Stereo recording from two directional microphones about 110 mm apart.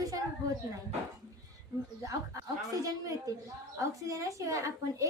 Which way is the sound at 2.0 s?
30° right (ahead or behind).